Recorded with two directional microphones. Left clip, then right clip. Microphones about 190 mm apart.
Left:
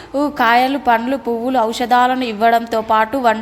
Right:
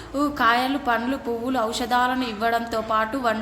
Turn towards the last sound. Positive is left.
turn(degrees=30)  # may be behind; listen again after turning